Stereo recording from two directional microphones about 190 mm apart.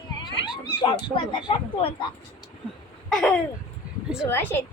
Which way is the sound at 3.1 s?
5° left (ahead or behind).